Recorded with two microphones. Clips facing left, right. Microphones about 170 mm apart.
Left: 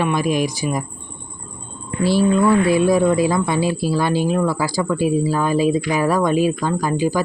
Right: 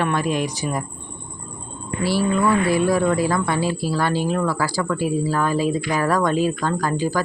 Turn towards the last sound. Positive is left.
turn(degrees=15)  # may be behind; listen again after turning